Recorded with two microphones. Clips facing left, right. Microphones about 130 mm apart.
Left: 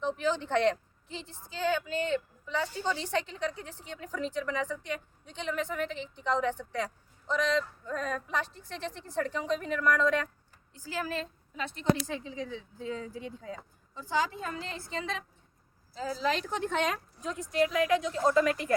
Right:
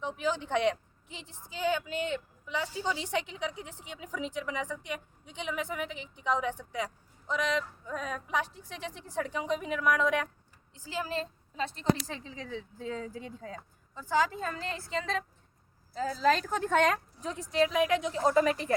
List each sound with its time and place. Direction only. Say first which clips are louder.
0.0 s a woman's voice: left 2 dB; 10° right (ahead or behind); by 15.2 s 40° right (ahead or behind)
16.2 s a woman's voice: right 4 dB; 45° right (ahead or behind)
17.3 s a woman's voice: right 1 dB; 30° right (ahead or behind)